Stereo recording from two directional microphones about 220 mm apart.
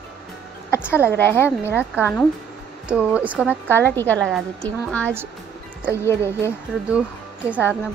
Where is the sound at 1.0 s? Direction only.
10° left (ahead or behind).